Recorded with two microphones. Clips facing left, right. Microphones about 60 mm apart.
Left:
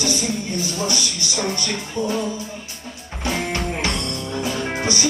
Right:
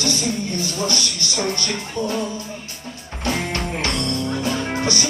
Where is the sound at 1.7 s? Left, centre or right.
Centre.